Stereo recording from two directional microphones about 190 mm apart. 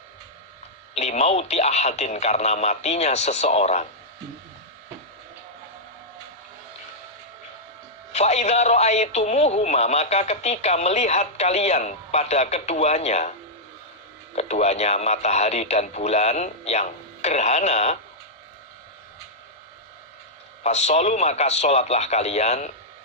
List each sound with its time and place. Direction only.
0.9 s speech: 35° left (ahead or behind)
8.1 s speech: 35° left (ahead or behind)
14.3 s speech: 35° left (ahead or behind)
20.7 s speech: 35° left (ahead or behind)